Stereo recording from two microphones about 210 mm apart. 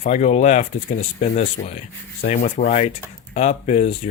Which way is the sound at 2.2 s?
35° left (ahead or behind).